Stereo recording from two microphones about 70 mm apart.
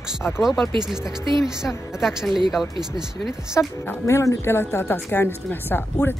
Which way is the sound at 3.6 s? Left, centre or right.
Left.